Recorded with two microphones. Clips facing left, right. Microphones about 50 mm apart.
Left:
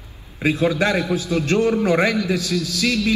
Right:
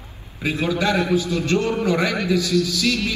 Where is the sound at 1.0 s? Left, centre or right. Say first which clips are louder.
Right 2 dB; right.